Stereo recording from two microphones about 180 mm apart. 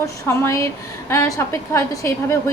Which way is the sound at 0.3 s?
15° left (ahead or behind).